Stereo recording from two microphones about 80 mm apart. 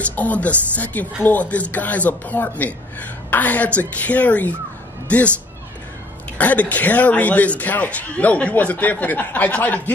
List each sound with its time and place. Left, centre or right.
0.0 s a man's voice: left
6.3 s a man's voice: centre